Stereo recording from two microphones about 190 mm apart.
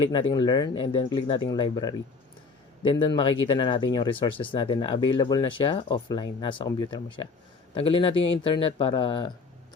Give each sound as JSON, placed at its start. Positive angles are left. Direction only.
{"t": 0.0, "sound": "speech", "side_deg": 25}